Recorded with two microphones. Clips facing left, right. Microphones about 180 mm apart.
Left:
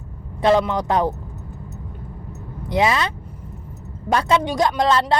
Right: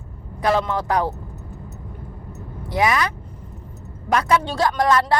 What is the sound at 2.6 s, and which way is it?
Speech, 25° left (ahead or behind).